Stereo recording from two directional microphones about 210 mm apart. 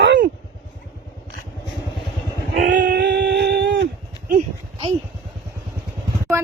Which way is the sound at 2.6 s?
55° right (ahead or behind).